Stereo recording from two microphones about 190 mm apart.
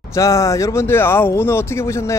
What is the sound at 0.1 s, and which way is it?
Speech, 15° left (ahead or behind).